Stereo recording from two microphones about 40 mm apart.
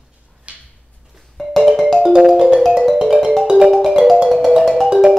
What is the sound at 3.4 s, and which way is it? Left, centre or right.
Music, centre.